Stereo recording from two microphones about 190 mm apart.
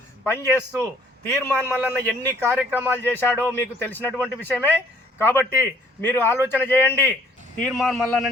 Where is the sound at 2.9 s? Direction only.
10° left (ahead or behind).